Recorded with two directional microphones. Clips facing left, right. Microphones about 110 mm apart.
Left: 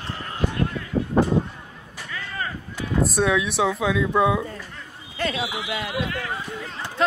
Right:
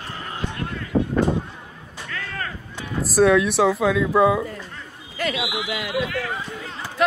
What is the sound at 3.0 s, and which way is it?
Speech, centre (ahead or behind).